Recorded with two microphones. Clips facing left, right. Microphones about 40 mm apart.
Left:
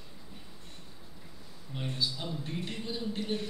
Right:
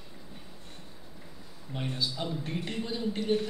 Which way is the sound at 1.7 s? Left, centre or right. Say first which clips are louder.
Right 3 dB; centre.